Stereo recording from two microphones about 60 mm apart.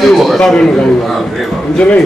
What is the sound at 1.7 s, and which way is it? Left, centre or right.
Speech, left.